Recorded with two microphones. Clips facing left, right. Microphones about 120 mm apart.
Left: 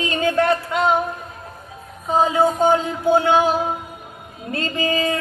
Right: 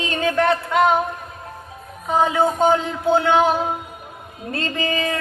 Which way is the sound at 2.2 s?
25° left (ahead or behind).